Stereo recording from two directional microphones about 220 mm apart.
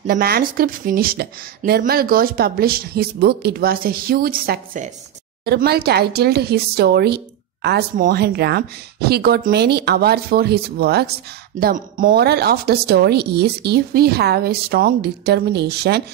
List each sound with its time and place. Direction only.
0.0 s speech: 40° right (ahead or behind)